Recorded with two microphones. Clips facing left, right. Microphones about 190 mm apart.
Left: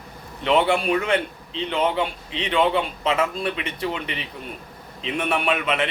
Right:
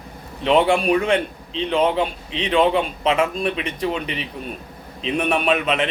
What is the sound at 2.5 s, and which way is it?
Speech, 15° right (ahead or behind).